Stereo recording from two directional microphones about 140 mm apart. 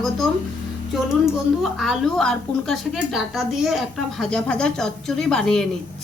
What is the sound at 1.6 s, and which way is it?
A woman's voice, centre (ahead or behind).